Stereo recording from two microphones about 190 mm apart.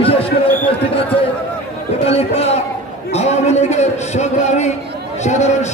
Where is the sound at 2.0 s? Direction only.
35° left (ahead or behind).